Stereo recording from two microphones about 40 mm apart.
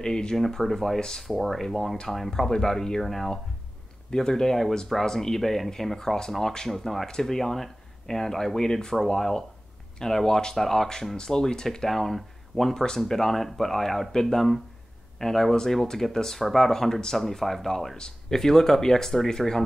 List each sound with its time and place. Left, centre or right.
0.0 s speech: centre
4.1 s speech: centre
17.9 s speech: centre